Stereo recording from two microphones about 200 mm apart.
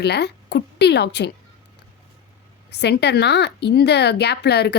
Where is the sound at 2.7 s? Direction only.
60° left (ahead or behind).